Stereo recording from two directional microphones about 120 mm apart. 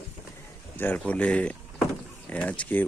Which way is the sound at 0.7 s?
15° left (ahead or behind).